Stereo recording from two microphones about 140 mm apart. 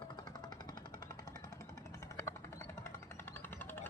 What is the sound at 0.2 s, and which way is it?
Jackhammer, 30° left (ahead or behind).